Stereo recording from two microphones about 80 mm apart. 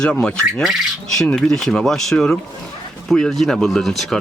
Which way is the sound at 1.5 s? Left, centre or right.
Centre.